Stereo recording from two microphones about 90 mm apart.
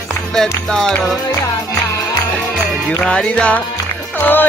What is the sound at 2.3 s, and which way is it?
Music, centre (ahead or behind).